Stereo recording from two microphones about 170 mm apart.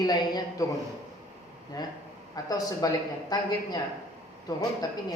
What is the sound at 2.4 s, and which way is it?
A woman's voice, 20° left (ahead or behind).